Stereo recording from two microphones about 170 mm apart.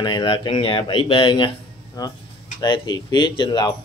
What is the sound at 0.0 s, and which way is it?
Speech, 25° left (ahead or behind).